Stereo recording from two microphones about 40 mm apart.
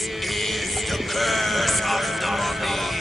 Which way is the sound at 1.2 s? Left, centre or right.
Centre.